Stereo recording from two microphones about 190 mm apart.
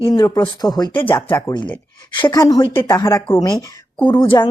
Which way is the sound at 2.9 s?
15° left (ahead or behind).